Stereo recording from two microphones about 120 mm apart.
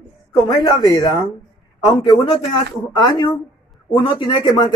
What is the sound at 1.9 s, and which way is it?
Speech, 35° left (ahead or behind).